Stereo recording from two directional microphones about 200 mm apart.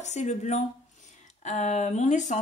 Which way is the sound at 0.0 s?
35° left (ahead or behind).